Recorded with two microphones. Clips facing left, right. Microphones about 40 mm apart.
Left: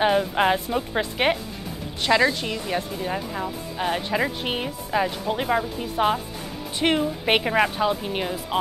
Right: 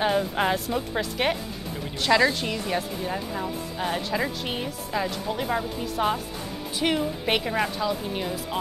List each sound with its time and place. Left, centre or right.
0.0 s speech: centre
2.0 s speech: centre; by 8.5 s left